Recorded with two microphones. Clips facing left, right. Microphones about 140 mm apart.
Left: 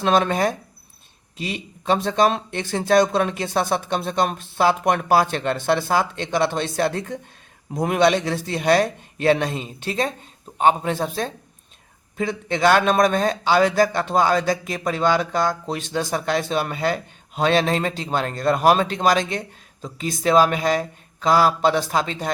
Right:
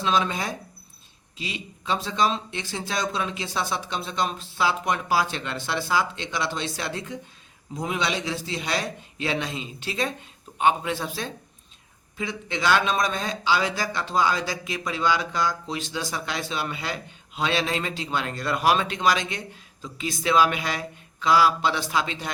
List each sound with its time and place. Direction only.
0.0 s a man's voice: 55° left (ahead or behind)